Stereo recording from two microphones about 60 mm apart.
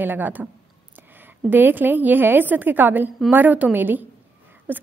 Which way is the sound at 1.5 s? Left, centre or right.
Right.